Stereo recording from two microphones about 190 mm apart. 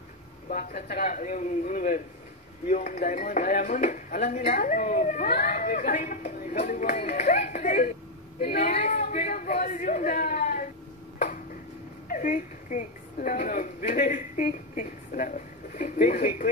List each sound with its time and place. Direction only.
0.5 s a man's voice: 45° left (ahead or behind)
8.7 s a man's voice: 35° left (ahead or behind)
12.1 s a woman's voice: 40° left (ahead or behind)